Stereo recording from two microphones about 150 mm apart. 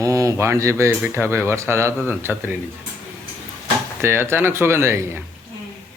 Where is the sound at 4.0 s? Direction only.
15° right (ahead or behind).